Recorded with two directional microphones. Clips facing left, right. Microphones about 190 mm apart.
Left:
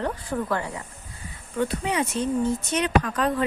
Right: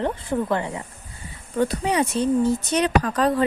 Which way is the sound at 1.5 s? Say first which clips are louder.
Right 4 dB; 40° right (ahead or behind).